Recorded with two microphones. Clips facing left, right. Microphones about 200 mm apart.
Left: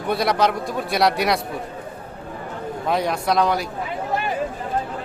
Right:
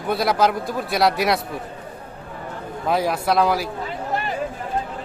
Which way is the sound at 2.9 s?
5° right (ahead or behind).